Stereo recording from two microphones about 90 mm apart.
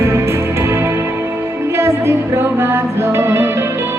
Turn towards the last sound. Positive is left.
turn(degrees=-30)  # may be behind; listen again after turning